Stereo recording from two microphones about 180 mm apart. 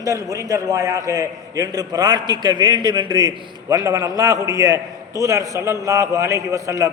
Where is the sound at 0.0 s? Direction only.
20° right (ahead or behind).